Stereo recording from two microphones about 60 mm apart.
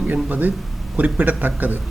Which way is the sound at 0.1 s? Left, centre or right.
Right.